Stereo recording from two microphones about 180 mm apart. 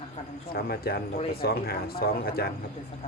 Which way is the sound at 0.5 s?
55° left (ahead or behind).